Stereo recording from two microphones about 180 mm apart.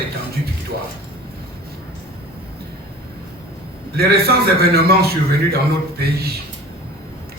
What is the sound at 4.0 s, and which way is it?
Speech, 60° right (ahead or behind).